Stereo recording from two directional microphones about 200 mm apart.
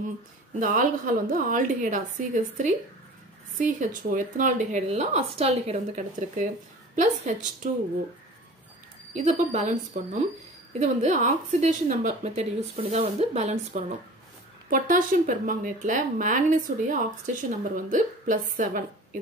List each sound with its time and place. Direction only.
0.6 s speech: 45° right (ahead or behind)
9.1 s speech: 35° right (ahead or behind)
10.8 s speech: 40° right (ahead or behind)